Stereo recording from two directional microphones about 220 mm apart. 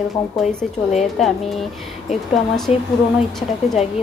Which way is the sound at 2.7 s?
30° left (ahead or behind).